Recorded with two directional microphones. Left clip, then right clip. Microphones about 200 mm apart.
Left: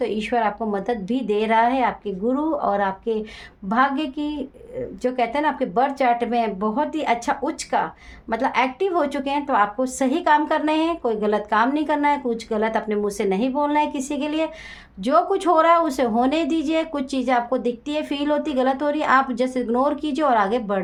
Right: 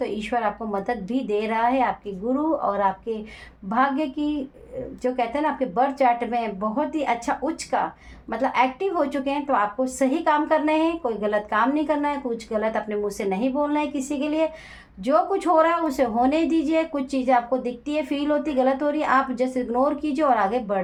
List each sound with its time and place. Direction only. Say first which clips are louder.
0.0 s a woman's voice: left 3 dB; 35° left (ahead or behind)